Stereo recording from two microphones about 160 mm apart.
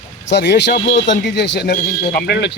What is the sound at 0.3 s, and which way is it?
Speech, 90° left.